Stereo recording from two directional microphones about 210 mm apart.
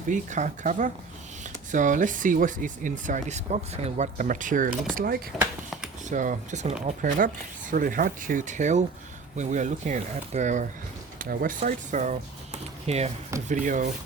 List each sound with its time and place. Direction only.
0.1 s speech: 35° right (ahead or behind)
5.4 s a sound: 5° right (ahead or behind)
6.1 s speech: 35° right (ahead or behind)